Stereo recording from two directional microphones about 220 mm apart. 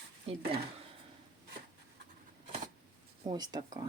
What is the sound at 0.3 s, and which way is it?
Speech, 25° right (ahead or behind).